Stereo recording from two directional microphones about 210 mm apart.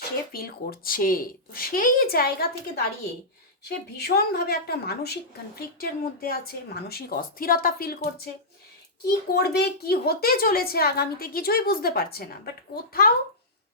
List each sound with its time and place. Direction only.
0.3 s a woman's voice: 45° left (ahead or behind)
9.3 s a woman's voice: 50° left (ahead or behind)